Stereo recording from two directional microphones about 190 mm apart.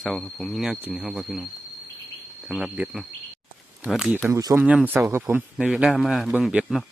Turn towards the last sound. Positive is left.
turn(degrees=-5)  # may be behind; listen again after turning